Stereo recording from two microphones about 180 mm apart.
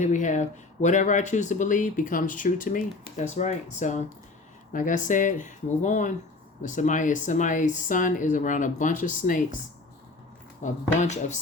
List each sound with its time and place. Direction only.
0.0 s speech: 45° left (ahead or behind)
10.6 s speech: 40° left (ahead or behind)